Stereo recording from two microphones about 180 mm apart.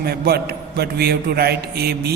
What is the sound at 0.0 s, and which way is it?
A man's voice, 60° right (ahead or behind).